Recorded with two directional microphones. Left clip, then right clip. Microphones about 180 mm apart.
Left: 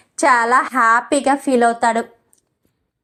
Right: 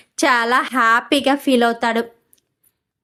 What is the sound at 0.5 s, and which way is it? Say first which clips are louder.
Speech: left 1 dB; 45° right (ahead or behind).